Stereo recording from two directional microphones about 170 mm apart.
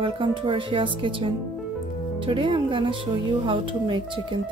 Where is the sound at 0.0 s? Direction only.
30° right (ahead or behind).